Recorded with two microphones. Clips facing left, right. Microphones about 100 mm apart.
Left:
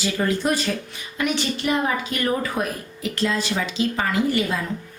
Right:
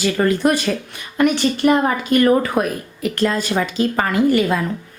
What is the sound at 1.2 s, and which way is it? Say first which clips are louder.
Speech: right 8 dB; 50° right (ahead or behind).